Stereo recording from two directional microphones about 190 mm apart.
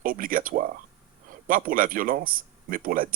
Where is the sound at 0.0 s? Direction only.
45° right (ahead or behind).